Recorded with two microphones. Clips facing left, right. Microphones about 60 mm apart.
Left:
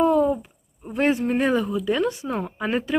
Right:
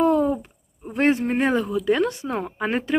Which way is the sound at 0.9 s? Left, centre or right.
Right.